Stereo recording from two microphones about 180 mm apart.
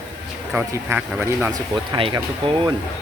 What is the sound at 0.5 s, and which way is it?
Speech, 10° right (ahead or behind).